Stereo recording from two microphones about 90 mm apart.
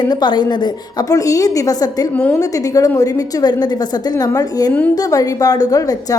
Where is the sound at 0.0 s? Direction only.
55° left (ahead or behind).